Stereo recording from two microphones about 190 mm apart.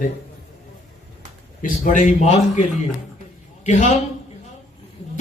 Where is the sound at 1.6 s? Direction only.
45° left (ahead or behind).